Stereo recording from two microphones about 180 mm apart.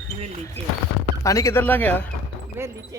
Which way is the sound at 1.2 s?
15° left (ahead or behind).